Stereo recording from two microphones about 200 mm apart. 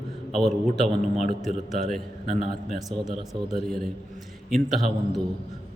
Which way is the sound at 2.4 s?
30° left (ahead or behind).